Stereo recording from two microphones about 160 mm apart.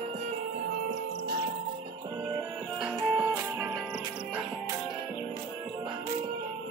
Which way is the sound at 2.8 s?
5° right (ahead or behind).